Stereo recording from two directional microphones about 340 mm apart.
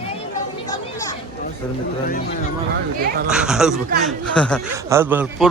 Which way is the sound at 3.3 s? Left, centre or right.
Centre.